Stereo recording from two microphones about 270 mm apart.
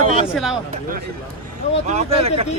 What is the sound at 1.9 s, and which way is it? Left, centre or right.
Speech, right.